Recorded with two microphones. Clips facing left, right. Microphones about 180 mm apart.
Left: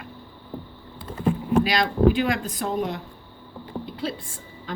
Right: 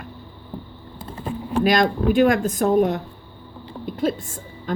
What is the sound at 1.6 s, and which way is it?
Speech, 45° right (ahead or behind).